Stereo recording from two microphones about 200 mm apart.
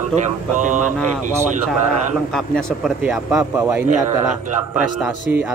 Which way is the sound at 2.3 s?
Centre (ahead or behind).